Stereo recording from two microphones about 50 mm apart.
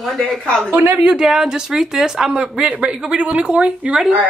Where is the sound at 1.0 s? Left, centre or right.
Centre.